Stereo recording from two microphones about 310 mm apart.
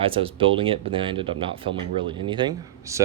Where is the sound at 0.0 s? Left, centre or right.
Centre.